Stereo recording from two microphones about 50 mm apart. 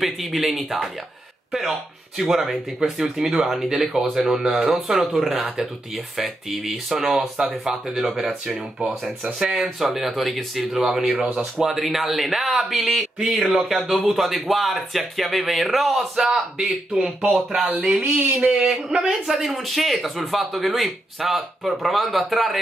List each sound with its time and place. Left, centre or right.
0.0 s speech: centre
7.2 s speech: centre
13.7 s speech: centre
17.5 s speech: centre
18.0 s a sound: right
18.7 s speech: centre